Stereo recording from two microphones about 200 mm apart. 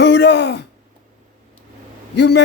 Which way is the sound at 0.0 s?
60° left (ahead or behind).